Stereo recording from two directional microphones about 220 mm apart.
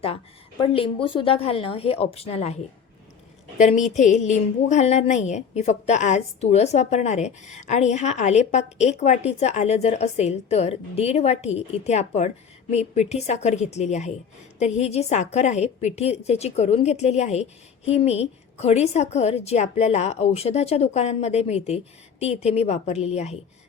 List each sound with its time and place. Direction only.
0.6 s a woman's voice: 25° left (ahead or behind)
3.6 s a woman's voice: 35° left (ahead or behind)